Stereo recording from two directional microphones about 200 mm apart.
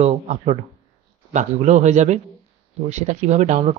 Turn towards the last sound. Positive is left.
turn(degrees=-35)  # may be behind; listen again after turning